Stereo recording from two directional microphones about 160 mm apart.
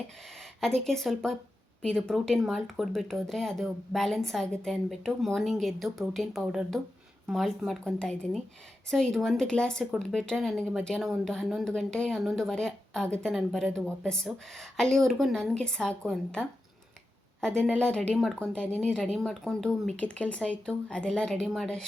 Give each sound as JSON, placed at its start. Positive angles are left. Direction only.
{"t": 0.6, "sound": "speech", "side_deg": 5}